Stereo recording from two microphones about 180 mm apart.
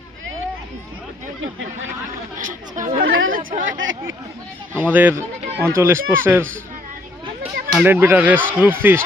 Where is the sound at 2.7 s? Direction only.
45° right (ahead or behind).